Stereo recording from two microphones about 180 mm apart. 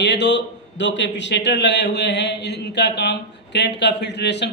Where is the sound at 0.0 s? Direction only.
70° left (ahead or behind).